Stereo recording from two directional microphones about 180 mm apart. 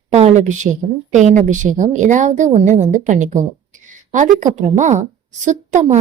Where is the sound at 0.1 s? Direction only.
35° right (ahead or behind).